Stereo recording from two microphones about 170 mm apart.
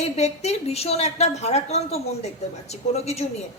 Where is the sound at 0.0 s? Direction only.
40° left (ahead or behind).